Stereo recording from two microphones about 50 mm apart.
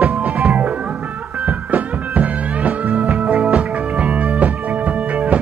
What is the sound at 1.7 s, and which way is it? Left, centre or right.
Music, right.